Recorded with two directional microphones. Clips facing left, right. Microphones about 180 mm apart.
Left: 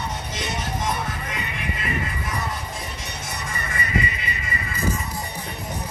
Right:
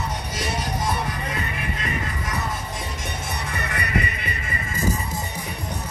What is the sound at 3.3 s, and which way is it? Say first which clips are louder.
Music: right 1 dB; 60° right (ahead or behind).